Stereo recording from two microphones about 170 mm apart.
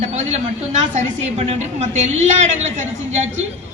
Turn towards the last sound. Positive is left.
turn(degrees=-40)  # may be behind; listen again after turning